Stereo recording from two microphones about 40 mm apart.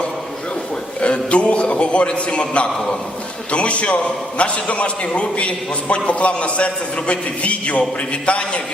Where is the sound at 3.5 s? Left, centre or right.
Left.